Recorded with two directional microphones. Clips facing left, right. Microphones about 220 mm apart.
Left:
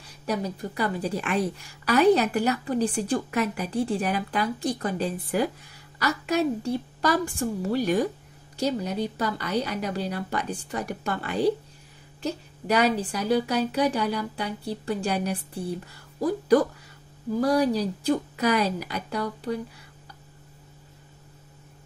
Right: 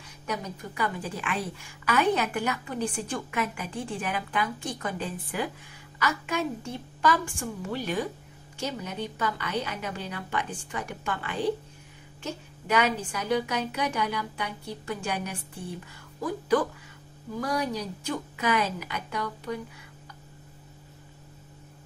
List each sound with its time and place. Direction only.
0.3 s a woman's voice: 35° left (ahead or behind)